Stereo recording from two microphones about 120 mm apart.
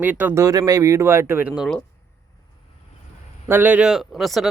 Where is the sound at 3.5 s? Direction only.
15° right (ahead or behind).